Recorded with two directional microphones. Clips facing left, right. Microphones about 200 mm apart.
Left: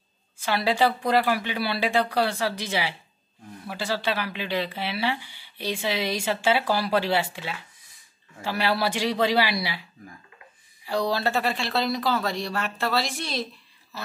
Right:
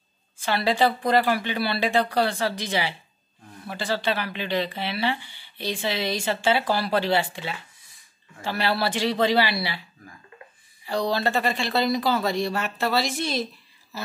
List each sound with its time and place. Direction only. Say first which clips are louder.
0.5 s speech: right 1 dB; 10° left (ahead or behind)
10.9 s speech: right 1 dB; 10° left (ahead or behind)